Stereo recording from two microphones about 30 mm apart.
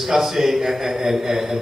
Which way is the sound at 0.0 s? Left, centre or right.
Centre.